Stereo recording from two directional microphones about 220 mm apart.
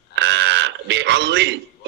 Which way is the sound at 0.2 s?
55° right (ahead or behind).